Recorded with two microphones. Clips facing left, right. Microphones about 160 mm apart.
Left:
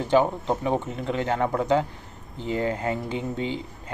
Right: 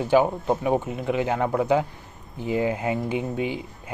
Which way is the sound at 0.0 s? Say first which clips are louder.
Right 1 dB; 10° right (ahead or behind).